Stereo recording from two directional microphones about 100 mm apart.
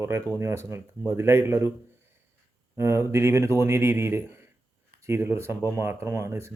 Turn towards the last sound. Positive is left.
turn(degrees=-30)  # may be behind; listen again after turning